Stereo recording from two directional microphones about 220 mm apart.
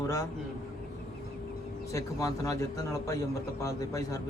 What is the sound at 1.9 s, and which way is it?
A man's voice, 15° left (ahead or behind).